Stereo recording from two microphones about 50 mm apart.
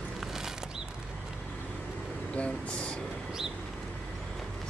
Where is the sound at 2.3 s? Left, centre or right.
Left.